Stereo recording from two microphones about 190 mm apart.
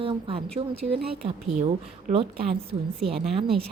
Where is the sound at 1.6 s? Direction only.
35° right (ahead or behind).